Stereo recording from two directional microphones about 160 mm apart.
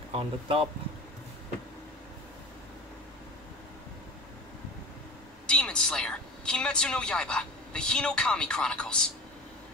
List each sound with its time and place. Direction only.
0.1 s speech: 35° right (ahead or behind)
5.5 s a woman's voice: 5° left (ahead or behind)